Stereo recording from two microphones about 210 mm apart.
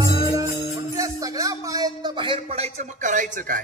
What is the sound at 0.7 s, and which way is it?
A man's voice, 15° right (ahead or behind).